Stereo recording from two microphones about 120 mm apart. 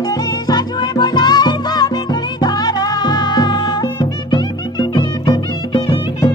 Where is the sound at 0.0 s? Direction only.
30° left (ahead or behind).